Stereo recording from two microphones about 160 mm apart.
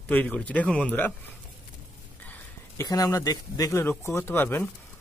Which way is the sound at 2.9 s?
20° left (ahead or behind).